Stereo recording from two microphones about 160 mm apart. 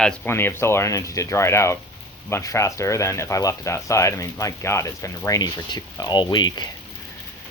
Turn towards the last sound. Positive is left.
turn(degrees=25)  # may be behind; listen again after turning